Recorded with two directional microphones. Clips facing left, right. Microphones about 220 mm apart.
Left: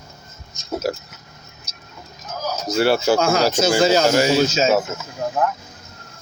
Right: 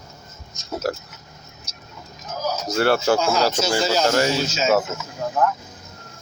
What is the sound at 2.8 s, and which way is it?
Speech, 10° left (ahead or behind).